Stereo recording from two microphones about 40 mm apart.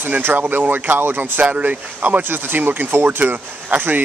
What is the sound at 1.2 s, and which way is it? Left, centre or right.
Speech, right.